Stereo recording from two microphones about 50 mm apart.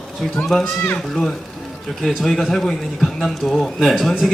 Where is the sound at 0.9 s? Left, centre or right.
Centre.